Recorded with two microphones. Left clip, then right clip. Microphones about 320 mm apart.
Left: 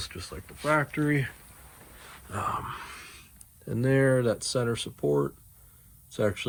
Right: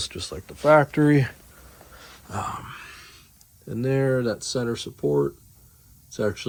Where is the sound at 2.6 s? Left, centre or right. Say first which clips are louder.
Left 2 dB; centre.